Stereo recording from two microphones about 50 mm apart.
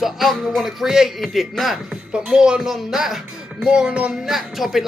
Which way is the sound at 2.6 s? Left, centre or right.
Centre.